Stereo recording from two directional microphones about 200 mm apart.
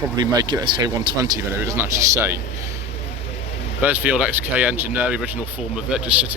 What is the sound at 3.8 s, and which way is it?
Speech, 10° right (ahead or behind).